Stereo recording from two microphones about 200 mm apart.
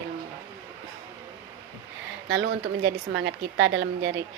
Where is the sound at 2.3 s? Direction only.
65° right (ahead or behind).